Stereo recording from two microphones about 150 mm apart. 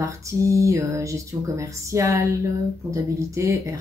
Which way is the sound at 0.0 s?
20° right (ahead or behind).